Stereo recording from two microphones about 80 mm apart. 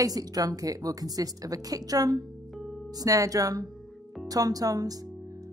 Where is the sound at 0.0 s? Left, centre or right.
Right.